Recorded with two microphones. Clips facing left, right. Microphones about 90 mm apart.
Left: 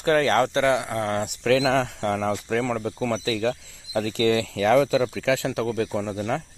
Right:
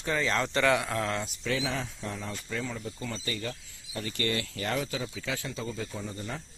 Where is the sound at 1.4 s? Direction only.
90° left.